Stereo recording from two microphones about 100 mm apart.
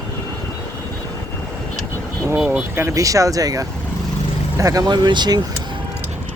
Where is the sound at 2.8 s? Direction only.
35° right (ahead or behind).